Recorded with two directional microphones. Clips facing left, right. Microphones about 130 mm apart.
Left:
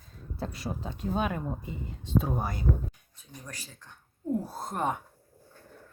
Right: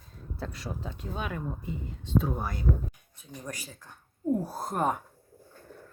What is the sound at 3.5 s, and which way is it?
Speech, 10° right (ahead or behind).